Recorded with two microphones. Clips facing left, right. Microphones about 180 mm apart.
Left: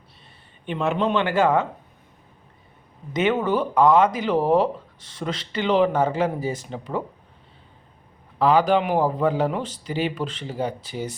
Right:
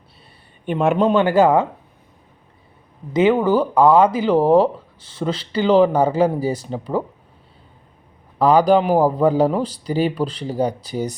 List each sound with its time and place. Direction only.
0.6 s a man's voice: 50° right (ahead or behind)
1.0 s speech: 40° right (ahead or behind)
3.1 s speech: 30° right (ahead or behind)
8.4 s speech: 40° right (ahead or behind)